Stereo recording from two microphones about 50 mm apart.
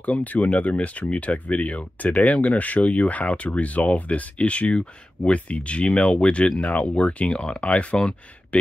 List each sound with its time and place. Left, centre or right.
0.0 s speech: left